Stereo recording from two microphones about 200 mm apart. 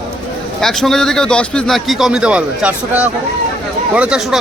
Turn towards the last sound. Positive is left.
turn(degrees=-5)  # may be behind; listen again after turning